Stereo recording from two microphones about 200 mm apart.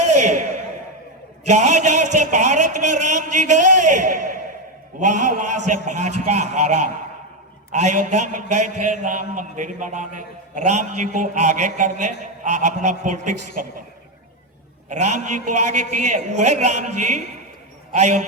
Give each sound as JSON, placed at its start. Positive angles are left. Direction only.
{"t": 0.0, "sound": "a sound", "side_deg": -35}
{"t": 1.5, "sound": "a man's voice", "side_deg": -35}
{"t": 14.8, "sound": "a man's voice", "side_deg": -40}